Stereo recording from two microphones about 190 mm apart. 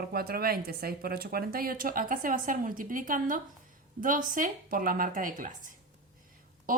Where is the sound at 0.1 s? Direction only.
55° right (ahead or behind).